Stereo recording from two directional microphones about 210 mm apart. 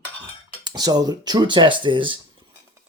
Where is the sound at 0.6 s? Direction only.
20° right (ahead or behind).